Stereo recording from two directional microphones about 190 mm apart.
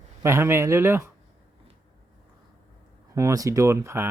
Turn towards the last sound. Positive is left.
turn(degrees=-15)  # may be behind; listen again after turning